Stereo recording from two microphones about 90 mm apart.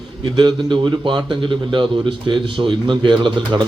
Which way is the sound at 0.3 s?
60° right (ahead or behind).